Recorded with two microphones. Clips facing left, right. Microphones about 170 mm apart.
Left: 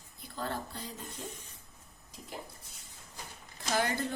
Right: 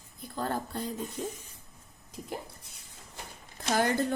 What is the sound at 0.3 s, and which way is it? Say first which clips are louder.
Speech: right 5 dB; 45° right (ahead or behind).